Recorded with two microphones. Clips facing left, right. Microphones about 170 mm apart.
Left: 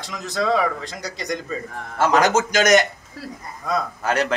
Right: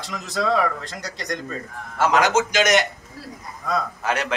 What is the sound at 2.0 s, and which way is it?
Speech, 40° left (ahead or behind).